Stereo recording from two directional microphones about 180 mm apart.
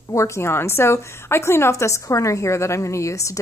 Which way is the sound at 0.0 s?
15° left (ahead or behind).